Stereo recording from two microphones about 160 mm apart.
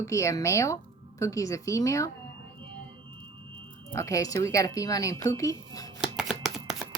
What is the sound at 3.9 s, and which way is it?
Speech, 20° left (ahead or behind).